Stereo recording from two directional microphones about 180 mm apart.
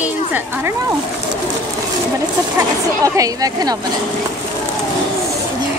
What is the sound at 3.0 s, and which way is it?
Speech, 20° right (ahead or behind).